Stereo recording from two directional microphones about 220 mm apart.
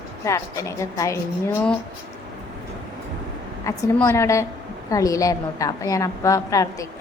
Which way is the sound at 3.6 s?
10° left (ahead or behind).